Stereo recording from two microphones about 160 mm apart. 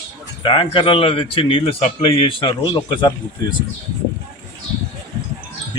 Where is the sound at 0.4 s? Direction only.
30° left (ahead or behind).